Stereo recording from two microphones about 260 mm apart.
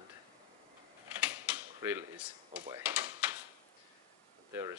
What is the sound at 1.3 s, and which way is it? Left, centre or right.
Mechanisms, centre.